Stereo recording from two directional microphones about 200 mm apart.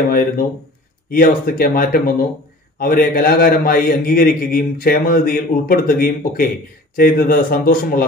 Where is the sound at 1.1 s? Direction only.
45° left (ahead or behind).